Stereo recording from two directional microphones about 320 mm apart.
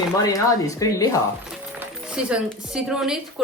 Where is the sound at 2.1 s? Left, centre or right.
Centre.